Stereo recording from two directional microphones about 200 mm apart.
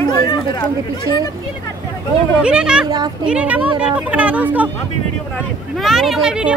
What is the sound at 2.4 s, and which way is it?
Speech, 5° right (ahead or behind).